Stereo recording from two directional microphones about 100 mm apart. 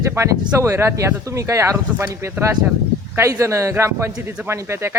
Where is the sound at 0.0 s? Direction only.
30° right (ahead or behind).